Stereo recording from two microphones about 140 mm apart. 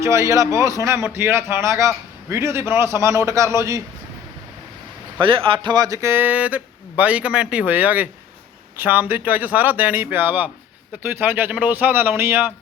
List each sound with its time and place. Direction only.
0.0 s a man's voice: 20° right (ahead or behind)
5.2 s speech: 40° right (ahead or behind); by 12.5 s 15° right (ahead or behind)